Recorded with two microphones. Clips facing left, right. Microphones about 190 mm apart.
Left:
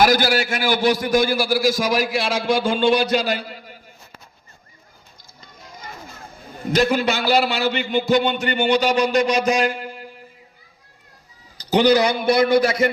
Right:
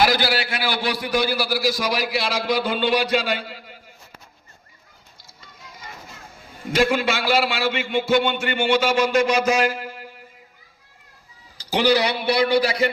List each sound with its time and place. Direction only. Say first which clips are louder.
0.0 s a man's voice: left 3 dB; 45° left (ahead or behind)
6.6 s speech: left 1 dB; 40° left (ahead or behind)
11.7 s a man's voice: left 4 dB; 40° left (ahead or behind)